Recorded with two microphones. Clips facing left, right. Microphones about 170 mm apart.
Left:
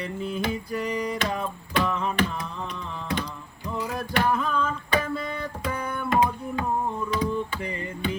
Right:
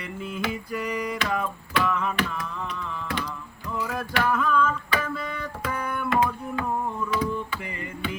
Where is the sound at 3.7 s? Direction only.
25° left (ahead or behind).